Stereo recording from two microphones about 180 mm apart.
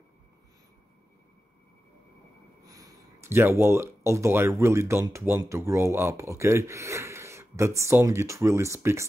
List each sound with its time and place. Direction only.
2.6 s speech: 20° right (ahead or behind)